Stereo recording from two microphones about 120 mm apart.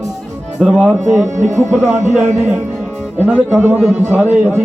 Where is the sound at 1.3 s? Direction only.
90° right.